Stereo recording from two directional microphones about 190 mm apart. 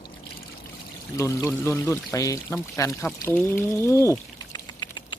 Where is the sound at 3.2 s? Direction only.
10° left (ahead or behind).